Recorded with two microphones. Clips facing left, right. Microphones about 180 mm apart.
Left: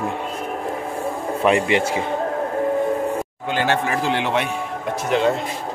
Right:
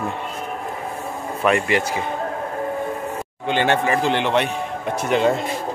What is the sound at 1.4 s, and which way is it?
Speech, 25° left (ahead or behind).